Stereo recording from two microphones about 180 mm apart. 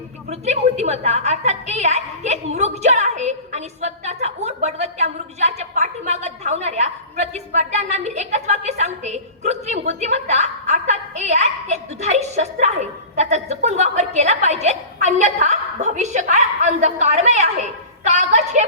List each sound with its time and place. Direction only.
0.3 s a woman's voice: 40° right (ahead or behind)